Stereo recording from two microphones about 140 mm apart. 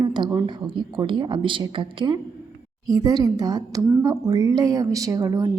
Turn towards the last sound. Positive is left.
turn(degrees=-25)  # may be behind; listen again after turning